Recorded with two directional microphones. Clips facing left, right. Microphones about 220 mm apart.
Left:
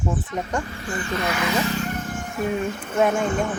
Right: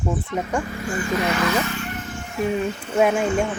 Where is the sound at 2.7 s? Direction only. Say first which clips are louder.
Even; 50° left (ahead or behind).